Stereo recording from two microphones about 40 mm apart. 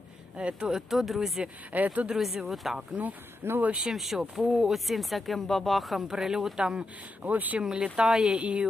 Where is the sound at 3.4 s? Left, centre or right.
Right.